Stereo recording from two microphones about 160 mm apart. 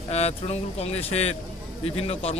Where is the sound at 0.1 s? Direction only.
40° left (ahead or behind).